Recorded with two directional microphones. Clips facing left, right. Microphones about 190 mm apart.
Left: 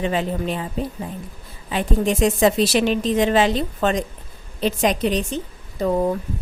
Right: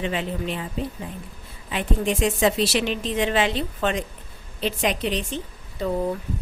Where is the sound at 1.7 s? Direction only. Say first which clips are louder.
Left 4 dB; 40° left (ahead or behind).